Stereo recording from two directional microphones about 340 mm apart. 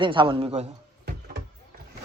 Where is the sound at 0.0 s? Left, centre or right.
Centre.